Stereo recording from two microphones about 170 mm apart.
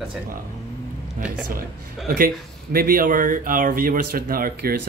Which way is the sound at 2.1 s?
60° right (ahead or behind).